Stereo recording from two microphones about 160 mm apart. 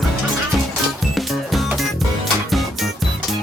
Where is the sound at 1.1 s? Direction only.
Centre (ahead or behind).